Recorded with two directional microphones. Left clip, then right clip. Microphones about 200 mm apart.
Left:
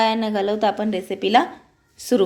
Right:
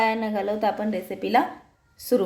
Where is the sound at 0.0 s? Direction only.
35° left (ahead or behind).